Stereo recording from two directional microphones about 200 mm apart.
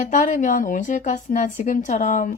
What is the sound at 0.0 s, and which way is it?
A woman's voice, 40° left (ahead or behind).